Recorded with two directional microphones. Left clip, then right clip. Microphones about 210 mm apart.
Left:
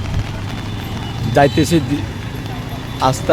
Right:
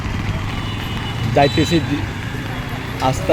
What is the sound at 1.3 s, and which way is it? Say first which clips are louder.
Speech: left 2 dB; 15° left (ahead or behind).